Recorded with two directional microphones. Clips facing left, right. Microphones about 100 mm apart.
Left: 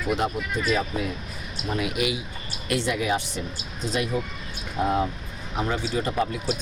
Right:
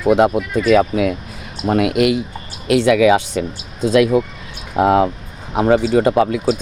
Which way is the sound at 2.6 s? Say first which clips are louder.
Right 13 dB; 85° right.